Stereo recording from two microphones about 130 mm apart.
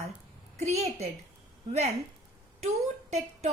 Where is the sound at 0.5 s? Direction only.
55° right (ahead or behind).